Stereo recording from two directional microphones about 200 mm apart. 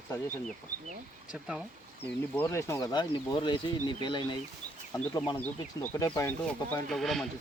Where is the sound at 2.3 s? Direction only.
10° left (ahead or behind).